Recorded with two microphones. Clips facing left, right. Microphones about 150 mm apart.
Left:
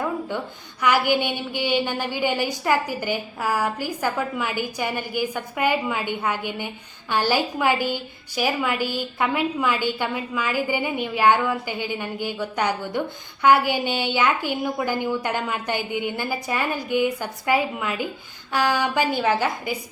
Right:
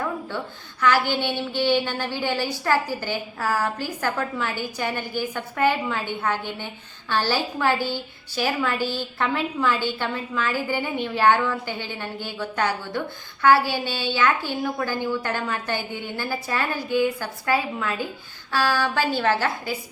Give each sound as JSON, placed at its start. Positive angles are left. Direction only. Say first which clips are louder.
{"t": 0.8, "sound": "a woman's voice", "louder": "left 1 dB", "side_deg": 15}